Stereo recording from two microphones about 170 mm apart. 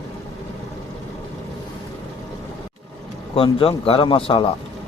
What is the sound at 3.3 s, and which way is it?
Speech, 35° left (ahead or behind).